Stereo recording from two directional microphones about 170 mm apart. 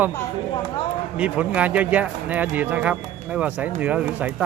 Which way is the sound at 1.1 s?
5° right (ahead or behind).